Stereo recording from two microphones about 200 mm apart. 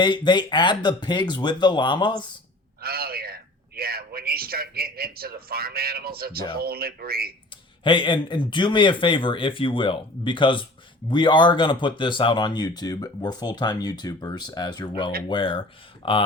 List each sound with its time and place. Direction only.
0.0 s speech: 20° left (ahead or behind)
2.8 s a man's voice: 50° right (ahead or behind)
7.9 s speech: 25° left (ahead or behind)